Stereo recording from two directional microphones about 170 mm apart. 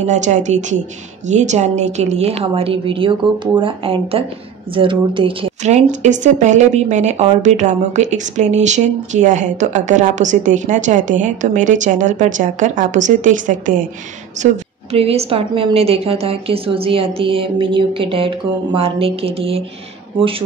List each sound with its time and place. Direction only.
0.0 s a woman's voice: 45° right (ahead or behind)
14.4 s a woman's voice: 35° right (ahead or behind)